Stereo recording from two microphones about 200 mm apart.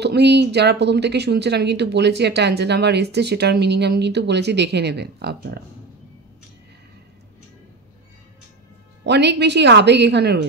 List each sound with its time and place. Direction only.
0.0 s speech: 55° right (ahead or behind)
9.0 s speech: 55° right (ahead or behind)